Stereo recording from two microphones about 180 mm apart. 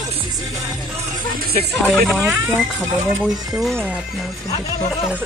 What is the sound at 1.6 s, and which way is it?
Speech, 45° right (ahead or behind).